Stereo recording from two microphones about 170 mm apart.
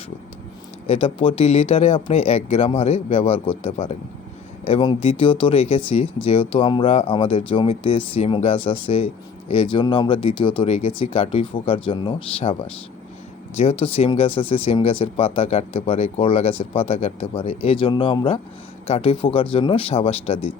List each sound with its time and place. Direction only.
0.9 s speech: 35° left (ahead or behind)